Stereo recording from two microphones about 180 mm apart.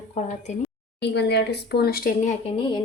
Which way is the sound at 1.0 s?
70° left (ahead or behind).